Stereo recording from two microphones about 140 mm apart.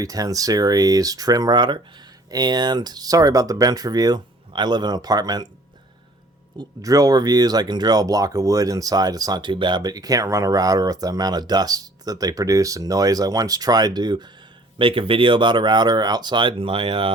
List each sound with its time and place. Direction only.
0.0 s speech: 25° right (ahead or behind)
6.6 s speech: 25° right (ahead or behind)